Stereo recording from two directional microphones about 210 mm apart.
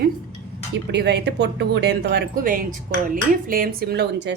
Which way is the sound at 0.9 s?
55° right (ahead or behind).